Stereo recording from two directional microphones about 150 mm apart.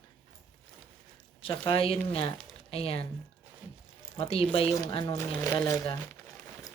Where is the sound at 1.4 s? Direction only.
35° left (ahead or behind).